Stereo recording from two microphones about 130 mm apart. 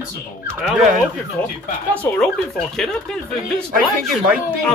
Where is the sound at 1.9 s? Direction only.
10° left (ahead or behind).